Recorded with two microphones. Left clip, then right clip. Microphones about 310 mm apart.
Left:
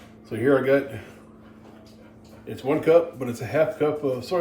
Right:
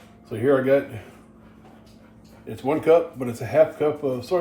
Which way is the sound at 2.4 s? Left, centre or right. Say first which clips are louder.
Right 2 dB; centre.